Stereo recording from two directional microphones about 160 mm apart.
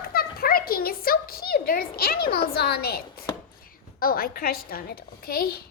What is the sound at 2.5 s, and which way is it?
A woman's voice, 70° left (ahead or behind).